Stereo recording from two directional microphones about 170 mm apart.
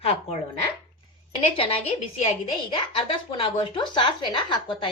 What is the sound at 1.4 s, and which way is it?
A woman's voice, 35° left (ahead or behind).